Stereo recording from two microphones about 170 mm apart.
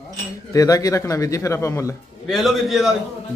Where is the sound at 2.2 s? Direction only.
Centre (ahead or behind).